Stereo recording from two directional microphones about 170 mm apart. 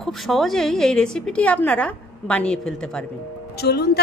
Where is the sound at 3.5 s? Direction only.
70° left (ahead or behind).